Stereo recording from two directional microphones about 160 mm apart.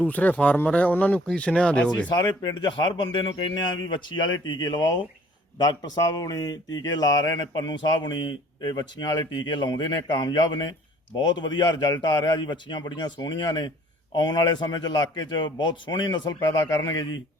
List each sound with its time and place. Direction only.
0.0 s speech: 10° left (ahead or behind)
2.0 s speech: 25° left (ahead or behind)